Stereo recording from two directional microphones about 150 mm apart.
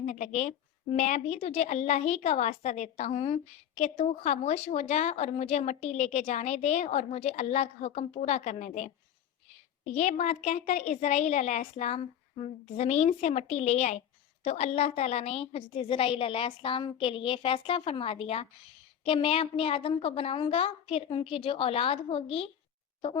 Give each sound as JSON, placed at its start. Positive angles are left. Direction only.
{"t": 0.0, "sound": "a woman's voice", "side_deg": 50}
{"t": 9.9, "sound": "a woman's voice", "side_deg": 50}